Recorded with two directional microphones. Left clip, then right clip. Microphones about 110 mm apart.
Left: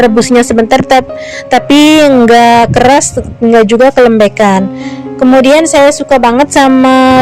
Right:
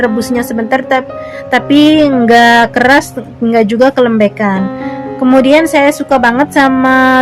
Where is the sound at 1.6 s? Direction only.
90° left.